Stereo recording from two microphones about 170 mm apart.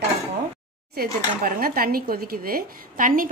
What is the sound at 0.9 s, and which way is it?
A woman's voice, 60° right (ahead or behind).